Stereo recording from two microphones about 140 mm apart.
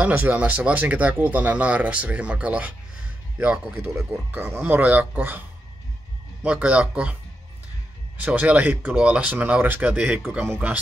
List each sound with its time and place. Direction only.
0.0 s speech: 10° right (ahead or behind)
6.4 s speech: 10° right (ahead or behind)
8.2 s speech: 10° right (ahead or behind)